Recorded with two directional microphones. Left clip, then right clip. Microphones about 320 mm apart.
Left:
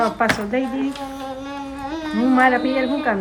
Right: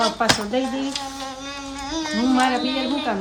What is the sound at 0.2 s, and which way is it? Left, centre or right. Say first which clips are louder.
Speech: even; centre.